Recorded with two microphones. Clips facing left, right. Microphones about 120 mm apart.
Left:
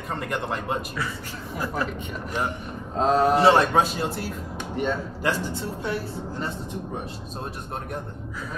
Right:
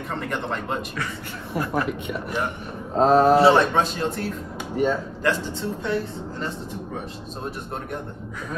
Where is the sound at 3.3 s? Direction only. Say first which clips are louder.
Right 2 dB; centre (ahead or behind).